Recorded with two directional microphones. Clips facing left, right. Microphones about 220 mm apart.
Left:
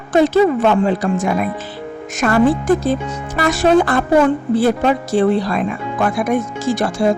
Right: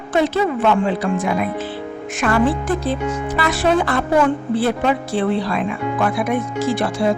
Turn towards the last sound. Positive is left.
turn(degrees=45)  # may be behind; listen again after turning